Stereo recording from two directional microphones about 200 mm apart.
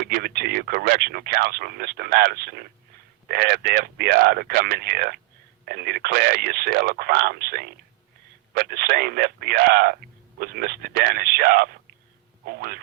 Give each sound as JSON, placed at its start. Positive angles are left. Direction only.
{"t": 0.0, "sound": "speech", "side_deg": -50}